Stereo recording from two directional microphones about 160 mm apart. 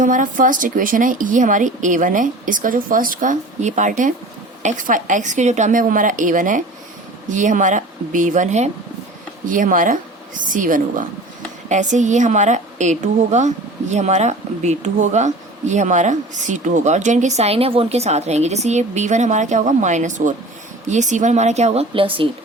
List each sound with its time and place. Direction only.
0.0 s speech: 55° right (ahead or behind); by 22.3 s 35° right (ahead or behind)